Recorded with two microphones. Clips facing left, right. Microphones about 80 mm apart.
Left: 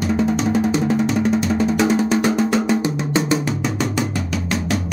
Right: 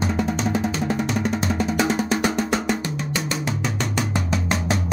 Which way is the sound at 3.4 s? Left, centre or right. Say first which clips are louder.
Left 4 dB; centre.